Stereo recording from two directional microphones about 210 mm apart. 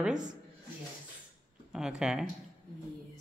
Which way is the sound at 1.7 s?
5° right (ahead or behind).